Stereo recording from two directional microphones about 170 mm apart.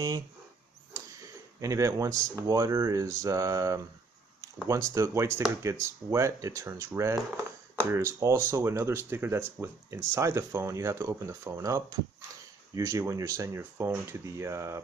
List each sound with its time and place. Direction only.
1.2 s speech: 20° right (ahead or behind)